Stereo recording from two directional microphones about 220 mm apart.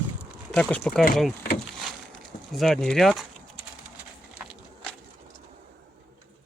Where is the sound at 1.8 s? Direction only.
Centre (ahead or behind).